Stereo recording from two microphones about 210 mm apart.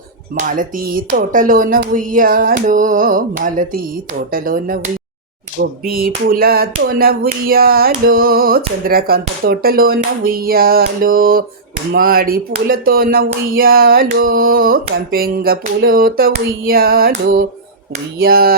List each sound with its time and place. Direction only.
0.3 s speech: 40° right (ahead or behind)